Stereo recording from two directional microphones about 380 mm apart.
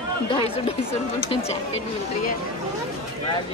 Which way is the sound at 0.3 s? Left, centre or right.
Centre.